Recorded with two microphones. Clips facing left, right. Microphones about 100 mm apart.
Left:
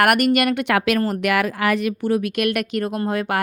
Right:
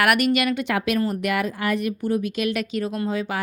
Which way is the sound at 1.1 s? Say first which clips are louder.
Left 4 dB; 90° left.